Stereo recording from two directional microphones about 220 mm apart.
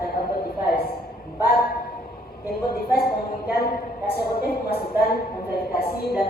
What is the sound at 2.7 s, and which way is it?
Speech, 45° left (ahead or behind).